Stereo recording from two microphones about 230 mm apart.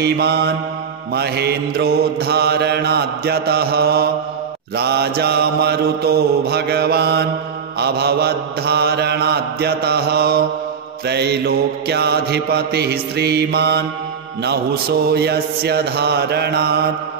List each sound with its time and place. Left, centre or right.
0.0 s mantra: right